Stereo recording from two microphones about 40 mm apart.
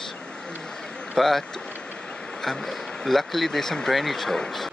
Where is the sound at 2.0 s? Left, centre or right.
Left.